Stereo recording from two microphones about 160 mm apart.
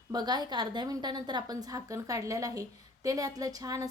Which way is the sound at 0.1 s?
25° right (ahead or behind).